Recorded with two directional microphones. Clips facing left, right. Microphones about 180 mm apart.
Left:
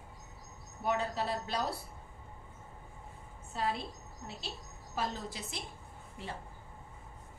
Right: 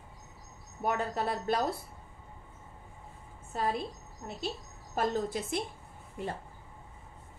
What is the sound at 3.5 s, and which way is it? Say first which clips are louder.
Speech: right 3 dB; 50° right (ahead or behind).